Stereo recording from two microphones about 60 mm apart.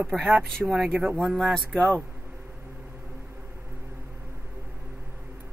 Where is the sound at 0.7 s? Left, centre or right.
Centre.